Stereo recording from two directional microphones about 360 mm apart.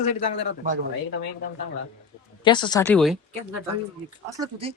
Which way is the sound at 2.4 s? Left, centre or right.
Centre.